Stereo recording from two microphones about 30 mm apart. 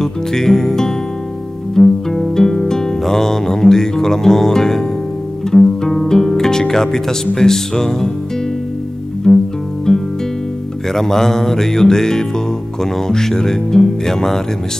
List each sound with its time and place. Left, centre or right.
0.0 s music: centre
6.7 s speech: centre
9.3 s music: left
10.9 s speech: centre